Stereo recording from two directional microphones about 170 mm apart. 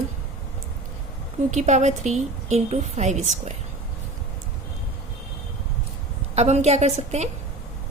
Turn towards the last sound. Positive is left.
turn(degrees=-40)  # may be behind; listen again after turning